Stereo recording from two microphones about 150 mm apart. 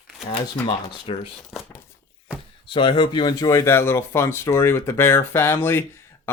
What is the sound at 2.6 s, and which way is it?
Speech, 35° left (ahead or behind).